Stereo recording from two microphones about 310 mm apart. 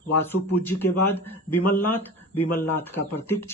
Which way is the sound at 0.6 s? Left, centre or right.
Centre.